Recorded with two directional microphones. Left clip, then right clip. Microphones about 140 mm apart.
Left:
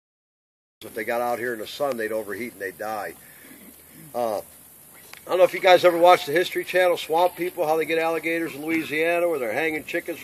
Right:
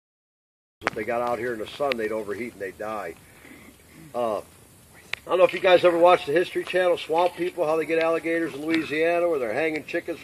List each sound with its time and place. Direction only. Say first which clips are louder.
0.9 s speech: left 3 dB; 40° right (ahead or behind)